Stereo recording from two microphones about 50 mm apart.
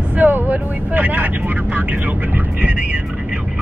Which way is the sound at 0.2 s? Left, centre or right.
Right.